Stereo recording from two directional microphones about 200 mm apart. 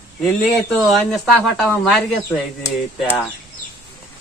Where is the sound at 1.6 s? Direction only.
5° left (ahead or behind).